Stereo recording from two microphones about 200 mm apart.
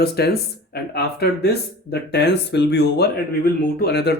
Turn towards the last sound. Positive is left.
turn(degrees=55)  # may be behind; listen again after turning